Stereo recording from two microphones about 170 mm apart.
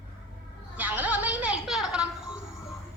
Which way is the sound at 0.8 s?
10° right (ahead or behind).